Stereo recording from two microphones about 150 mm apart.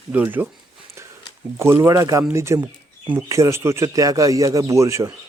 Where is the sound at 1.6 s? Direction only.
15° right (ahead or behind).